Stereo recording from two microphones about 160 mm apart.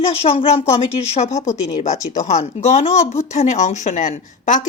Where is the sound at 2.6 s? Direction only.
45° left (ahead or behind).